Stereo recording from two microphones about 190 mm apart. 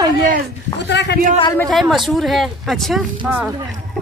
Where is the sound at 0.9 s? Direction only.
65° left (ahead or behind).